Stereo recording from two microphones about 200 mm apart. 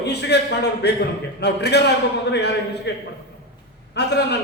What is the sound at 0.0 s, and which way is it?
A man's voice, 55° left (ahead or behind).